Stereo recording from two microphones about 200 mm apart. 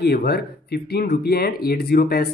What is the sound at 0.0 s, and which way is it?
Speech, 50° left (ahead or behind).